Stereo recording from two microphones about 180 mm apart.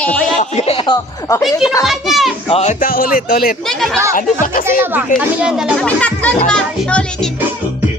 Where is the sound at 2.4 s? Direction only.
35° left (ahead or behind); by 3.5 s 50° left (ahead or behind).